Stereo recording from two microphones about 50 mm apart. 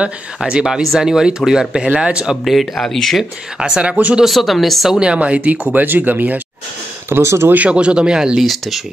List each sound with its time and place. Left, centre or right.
0.7 s speech: centre
2.4 s speech: centre
3.5 s speech: right
4.2 s speech: centre
4.9 s speech: centre
7.1 s speech: right
7.4 s speech: right; by 8.4 s centre
8.4 s speech: centre